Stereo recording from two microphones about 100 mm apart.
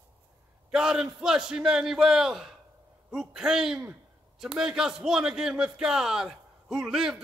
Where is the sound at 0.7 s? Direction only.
5° right (ahead or behind).